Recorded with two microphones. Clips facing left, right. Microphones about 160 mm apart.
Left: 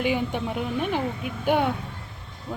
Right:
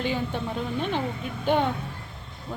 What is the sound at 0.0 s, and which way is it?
A woman's voice, 15° left (ahead or behind).